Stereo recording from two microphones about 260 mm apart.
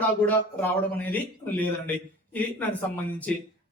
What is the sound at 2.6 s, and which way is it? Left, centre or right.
Speech, centre.